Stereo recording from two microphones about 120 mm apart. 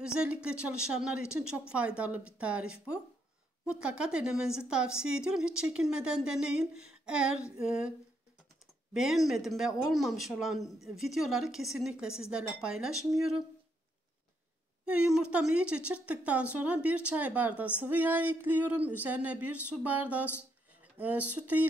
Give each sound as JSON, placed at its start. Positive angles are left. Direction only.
{"t": 0.0, "sound": "a woman's voice", "side_deg": -10}
{"t": 8.9, "sound": "speech", "side_deg": 0}
{"t": 14.9, "sound": "a woman's voice", "side_deg": -5}